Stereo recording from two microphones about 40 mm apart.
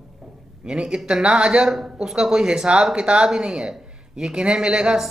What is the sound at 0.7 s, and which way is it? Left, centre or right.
Speech, right.